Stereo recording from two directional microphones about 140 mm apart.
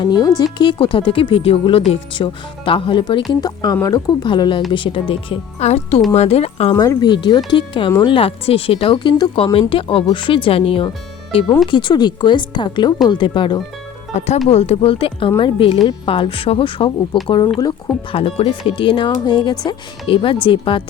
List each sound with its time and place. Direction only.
0.0 s speech: 30° left (ahead or behind); by 6.7 s 45° left (ahead or behind)
6.7 s speech: 30° left (ahead or behind)
14.3 s speech: 50° left (ahead or behind); by 17.9 s 25° left (ahead or behind)
18.1 s speech: 45° left (ahead or behind)